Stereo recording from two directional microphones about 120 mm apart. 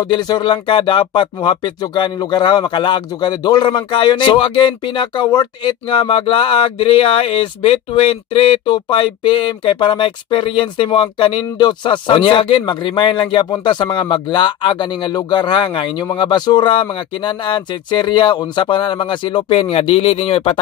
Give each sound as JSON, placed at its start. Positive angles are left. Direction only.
{"t": 0.0, "sound": "speech", "side_deg": 35}